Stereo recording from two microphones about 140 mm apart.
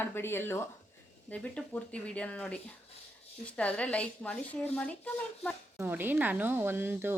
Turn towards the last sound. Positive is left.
turn(degrees=-15)  # may be behind; listen again after turning